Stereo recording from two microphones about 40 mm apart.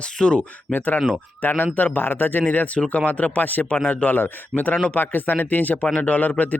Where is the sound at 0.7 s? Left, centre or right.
Left.